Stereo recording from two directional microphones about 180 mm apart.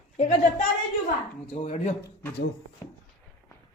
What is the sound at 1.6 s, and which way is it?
Speech, 40° left (ahead or behind).